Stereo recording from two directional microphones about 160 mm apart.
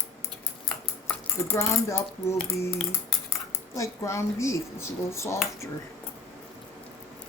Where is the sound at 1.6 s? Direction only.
20° left (ahead or behind).